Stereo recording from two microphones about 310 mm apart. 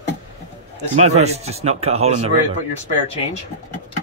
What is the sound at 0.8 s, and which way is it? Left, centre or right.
Speech, right.